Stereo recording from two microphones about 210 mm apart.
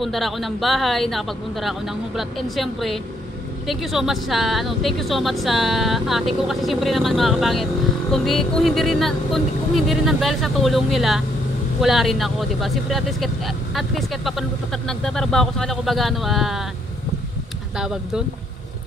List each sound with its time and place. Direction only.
0.0 s speech: centre (ahead or behind)
17.7 s speech: 5° right (ahead or behind)